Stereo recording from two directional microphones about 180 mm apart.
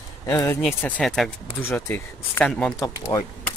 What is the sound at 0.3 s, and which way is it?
Speech, 10° left (ahead or behind).